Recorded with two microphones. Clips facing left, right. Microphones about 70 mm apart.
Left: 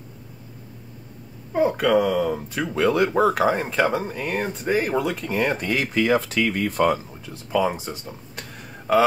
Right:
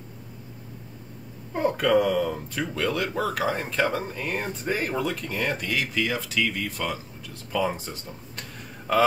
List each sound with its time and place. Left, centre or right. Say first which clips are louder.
1.5 s speech: left 3 dB; centre
5.2 s speech: left 5 dB; left
7.7 s a sound: left 4 dB; centre